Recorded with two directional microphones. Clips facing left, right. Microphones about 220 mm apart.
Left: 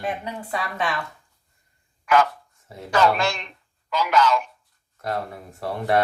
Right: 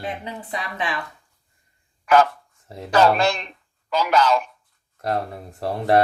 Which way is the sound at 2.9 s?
35° right (ahead or behind).